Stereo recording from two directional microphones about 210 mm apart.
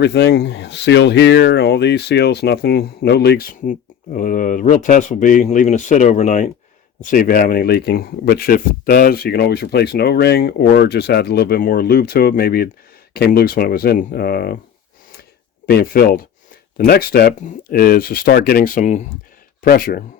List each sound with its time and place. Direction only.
0.0 s speech: 55° left (ahead or behind)
15.6 s speech: 45° left (ahead or behind)